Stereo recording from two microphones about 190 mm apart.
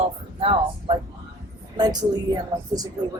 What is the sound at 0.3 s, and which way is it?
Speech, 30° right (ahead or behind).